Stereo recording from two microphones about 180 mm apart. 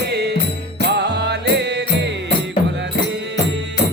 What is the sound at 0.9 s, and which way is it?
Music, 65° right (ahead or behind).